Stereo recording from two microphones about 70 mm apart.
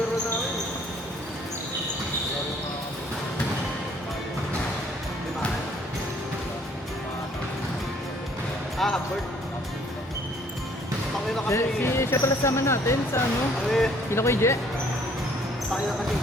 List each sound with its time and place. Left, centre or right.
8.8 s music: centre
11.4 s speech: left
13.7 s speech: centre
14.1 s speech: left